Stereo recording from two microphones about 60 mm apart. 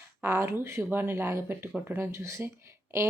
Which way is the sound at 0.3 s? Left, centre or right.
Right.